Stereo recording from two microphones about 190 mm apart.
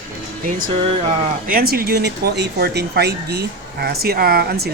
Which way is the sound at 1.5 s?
50° right (ahead or behind).